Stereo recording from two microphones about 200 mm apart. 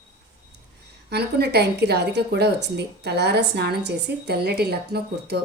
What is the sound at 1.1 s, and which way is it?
A woman's voice, 55° right (ahead or behind).